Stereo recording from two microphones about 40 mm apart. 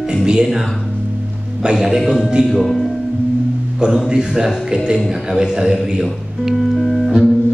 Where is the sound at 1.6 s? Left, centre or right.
Centre.